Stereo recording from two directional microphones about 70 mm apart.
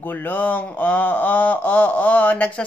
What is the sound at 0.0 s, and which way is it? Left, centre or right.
Speech, left.